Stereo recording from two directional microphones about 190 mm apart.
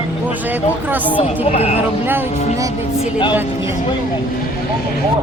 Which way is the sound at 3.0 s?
25° left (ahead or behind).